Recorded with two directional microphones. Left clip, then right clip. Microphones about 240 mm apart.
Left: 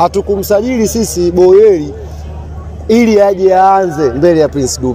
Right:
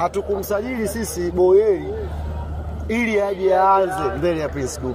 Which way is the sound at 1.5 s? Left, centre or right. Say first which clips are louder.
Left 9 dB; left.